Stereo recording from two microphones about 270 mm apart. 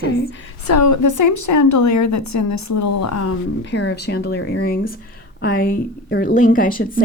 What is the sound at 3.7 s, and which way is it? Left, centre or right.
A woman's voice, left.